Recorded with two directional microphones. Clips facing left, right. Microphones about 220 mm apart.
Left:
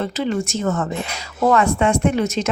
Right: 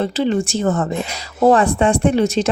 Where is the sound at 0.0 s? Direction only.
30° right (ahead or behind).